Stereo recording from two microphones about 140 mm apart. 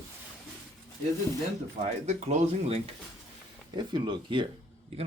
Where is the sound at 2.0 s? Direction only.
50° right (ahead or behind).